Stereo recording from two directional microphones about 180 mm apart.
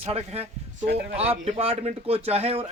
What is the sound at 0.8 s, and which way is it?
Speech, 70° right (ahead or behind).